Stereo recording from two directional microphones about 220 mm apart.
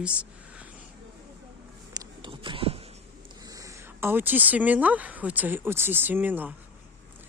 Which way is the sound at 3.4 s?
15° right (ahead or behind).